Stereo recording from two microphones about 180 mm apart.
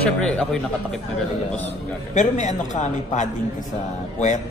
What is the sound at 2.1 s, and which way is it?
A man's voice, 40° left (ahead or behind).